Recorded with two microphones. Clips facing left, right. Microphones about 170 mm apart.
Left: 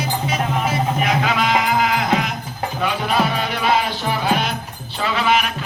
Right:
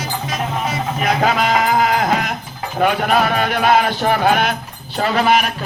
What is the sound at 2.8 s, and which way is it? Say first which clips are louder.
Music: right 5 dB; 55° right (ahead or behind).